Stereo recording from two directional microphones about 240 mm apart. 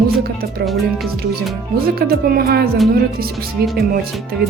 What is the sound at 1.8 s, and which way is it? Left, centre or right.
Speech, right.